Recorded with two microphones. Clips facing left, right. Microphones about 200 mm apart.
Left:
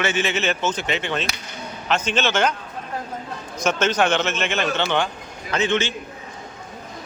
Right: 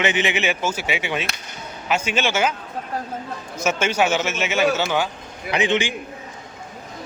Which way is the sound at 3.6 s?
10° right (ahead or behind).